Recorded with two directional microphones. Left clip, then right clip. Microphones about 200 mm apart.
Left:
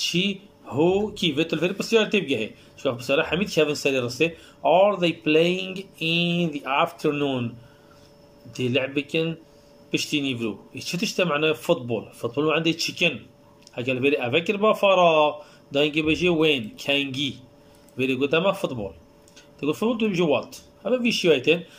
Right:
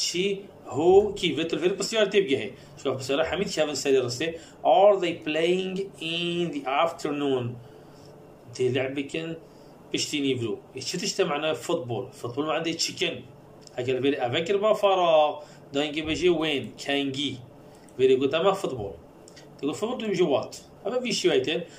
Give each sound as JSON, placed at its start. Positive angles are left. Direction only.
{"t": 0.0, "sound": "a man's voice", "side_deg": 45}
{"t": 8.5, "sound": "a man's voice", "side_deg": 45}